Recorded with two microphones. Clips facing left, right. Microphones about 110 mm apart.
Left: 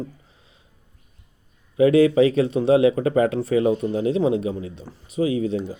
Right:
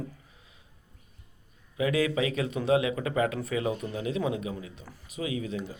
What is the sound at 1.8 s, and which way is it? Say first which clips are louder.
Speech: left 12 dB; 30° left (ahead or behind).